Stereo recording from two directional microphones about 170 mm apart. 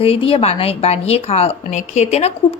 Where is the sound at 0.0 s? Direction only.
35° left (ahead or behind).